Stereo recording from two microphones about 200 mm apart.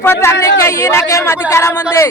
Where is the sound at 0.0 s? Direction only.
10° left (ahead or behind).